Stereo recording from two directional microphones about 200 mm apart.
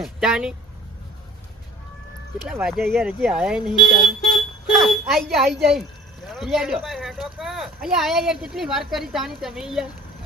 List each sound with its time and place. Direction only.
0.0 s speech: 5° right (ahead or behind)
2.5 s speech: centre (ahead or behind)
3.7 s speech: 20° left (ahead or behind)
4.4 s speech: centre (ahead or behind)